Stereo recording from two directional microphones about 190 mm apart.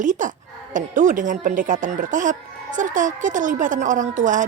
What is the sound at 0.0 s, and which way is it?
A woman's voice, 40° right (ahead or behind).